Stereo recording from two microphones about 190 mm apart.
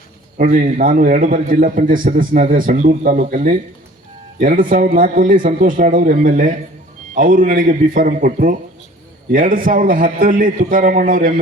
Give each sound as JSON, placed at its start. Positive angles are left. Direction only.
{"t": 0.3, "sound": "a man's voice", "side_deg": -45}